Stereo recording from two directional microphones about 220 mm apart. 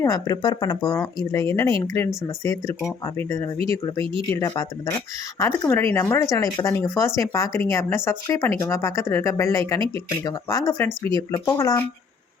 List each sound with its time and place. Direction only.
0.0 s speech: 15° left (ahead or behind)